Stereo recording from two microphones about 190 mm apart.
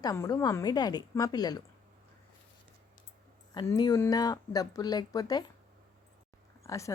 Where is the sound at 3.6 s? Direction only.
20° left (ahead or behind).